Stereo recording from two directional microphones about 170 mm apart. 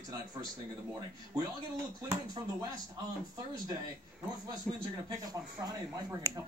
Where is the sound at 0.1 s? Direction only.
20° right (ahead or behind).